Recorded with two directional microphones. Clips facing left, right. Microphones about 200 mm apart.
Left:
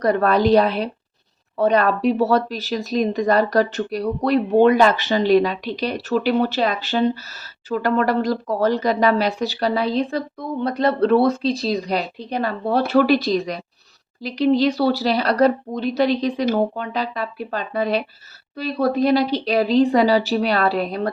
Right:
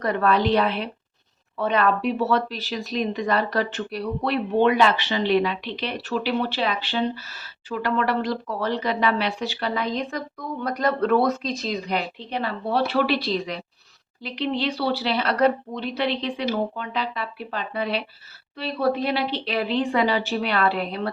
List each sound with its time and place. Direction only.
0.0 s speech: 40° left (ahead or behind)